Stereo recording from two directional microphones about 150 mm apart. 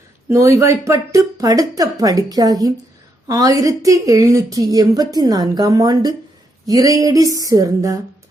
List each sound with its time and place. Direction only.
0.3 s a woman's voice: 20° right (ahead or behind)